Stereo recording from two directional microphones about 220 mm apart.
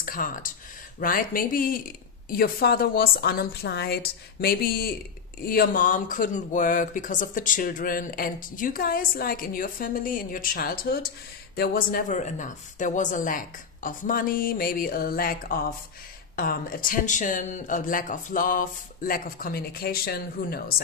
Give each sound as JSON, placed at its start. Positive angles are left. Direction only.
{"t": 0.0, "sound": "a woman's voice", "side_deg": 40}